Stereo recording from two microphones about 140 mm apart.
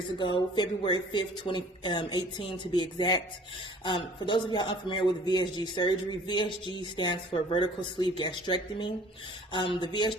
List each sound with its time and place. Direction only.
0.2 s speech: 35° left (ahead or behind)